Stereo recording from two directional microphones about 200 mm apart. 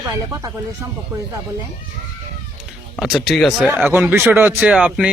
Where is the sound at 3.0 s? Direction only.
Centre (ahead or behind).